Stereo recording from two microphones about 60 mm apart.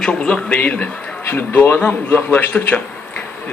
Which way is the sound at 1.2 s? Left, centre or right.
Left.